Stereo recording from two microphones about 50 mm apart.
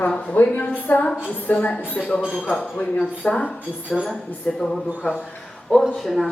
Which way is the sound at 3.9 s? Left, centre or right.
Centre.